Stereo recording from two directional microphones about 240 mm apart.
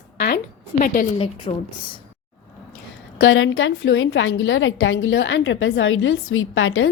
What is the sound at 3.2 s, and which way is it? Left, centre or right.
A woman's voice, left.